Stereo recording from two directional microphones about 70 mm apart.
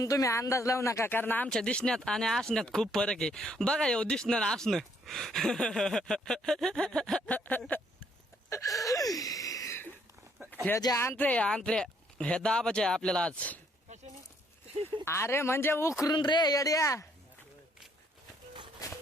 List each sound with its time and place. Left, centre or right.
0.0 s speech: left
1.1 s speech: left
1.5 s speech: centre
7.3 s speech: left
8.4 s a sound: left
10.9 s speech: left
11.2 s speech: centre
15.0 s speech: left
16.0 s speech: left